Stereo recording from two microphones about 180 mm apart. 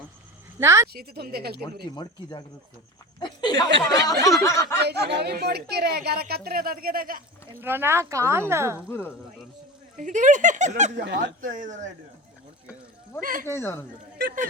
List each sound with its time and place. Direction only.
0.6 s speech: 15° right (ahead or behind)
0.9 s speech: 60° right (ahead or behind)
3.2 s speech: 25° left (ahead or behind)
3.8 s a sound: 20° left (ahead or behind)
4.8 s speech: 65° right (ahead or behind)
7.6 s speech: 10° right (ahead or behind)
8.9 s a sound: 15° left (ahead or behind)
10.0 s speech: 45° right (ahead or behind)
11.0 s speech: 75° right (ahead or behind)
11.3 s speech: 50° right (ahead or behind)
13.4 s a sound: 15° left (ahead or behind)